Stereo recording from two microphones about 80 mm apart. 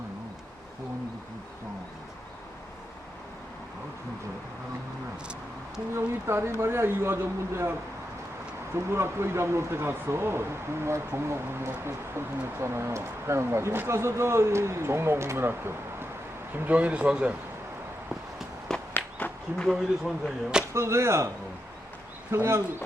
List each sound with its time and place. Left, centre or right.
5.9 s speech: right
16.6 s a man's voice: centre
18.7 s walk: centre
20.2 s a man's voice: centre
20.7 s speech: right
22.3 s speech: right